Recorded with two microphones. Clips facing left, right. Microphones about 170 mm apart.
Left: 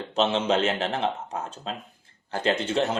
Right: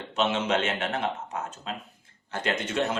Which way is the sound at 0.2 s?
30° left (ahead or behind).